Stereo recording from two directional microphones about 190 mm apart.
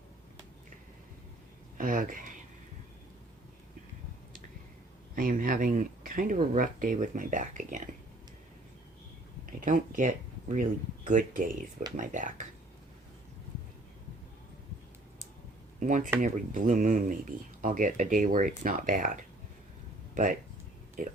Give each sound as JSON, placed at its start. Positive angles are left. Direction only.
{"t": 1.8, "sound": "speech", "side_deg": -45}
{"t": 5.1, "sound": "speech", "side_deg": -45}
{"t": 9.5, "sound": "speech", "side_deg": -45}
{"t": 15.8, "sound": "speech", "side_deg": -40}